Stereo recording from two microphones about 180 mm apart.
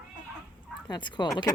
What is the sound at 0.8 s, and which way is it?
Speech, 25° left (ahead or behind).